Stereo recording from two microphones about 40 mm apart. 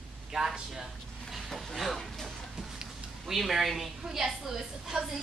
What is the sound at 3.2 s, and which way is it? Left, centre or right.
A woman's voice, centre.